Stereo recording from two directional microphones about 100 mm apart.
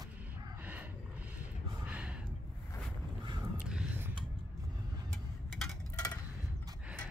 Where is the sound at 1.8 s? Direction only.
15° right (ahead or behind).